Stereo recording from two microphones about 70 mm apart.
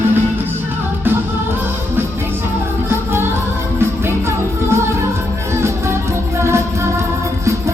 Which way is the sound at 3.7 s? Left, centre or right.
Right.